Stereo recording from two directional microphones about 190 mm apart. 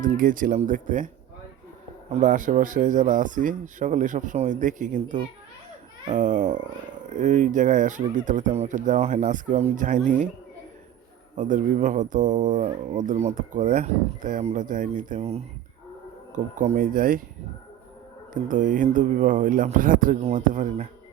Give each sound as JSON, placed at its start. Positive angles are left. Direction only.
{"t": 0.0, "sound": "speech", "side_deg": -45}
{"t": 2.1, "sound": "a child's voice", "side_deg": -40}
{"t": 11.3, "sound": "speech", "side_deg": -45}
{"t": 18.4, "sound": "speech", "side_deg": -45}